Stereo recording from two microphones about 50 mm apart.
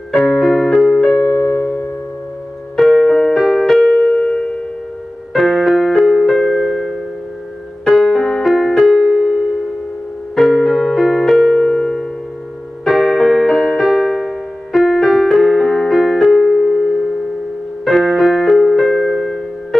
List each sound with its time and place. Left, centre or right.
0.3 s keyboard: centre
0.7 s music: centre
1.2 s piano: centre
2.7 s music: centre
4.1 s music: left
5.3 s keyboard: centre
7.8 s piano: centre
8.5 s music: centre
8.8 s keyboard: centre
10.3 s music: centre
11.1 s electric piano: centre
12.8 s keyboard: centre
16.2 s piano: centre